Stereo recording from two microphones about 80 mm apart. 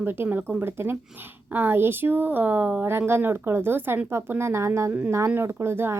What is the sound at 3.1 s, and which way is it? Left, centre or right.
A woman's voice, right.